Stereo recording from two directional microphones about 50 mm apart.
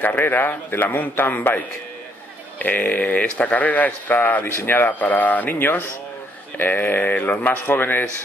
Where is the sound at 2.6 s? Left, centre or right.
Left.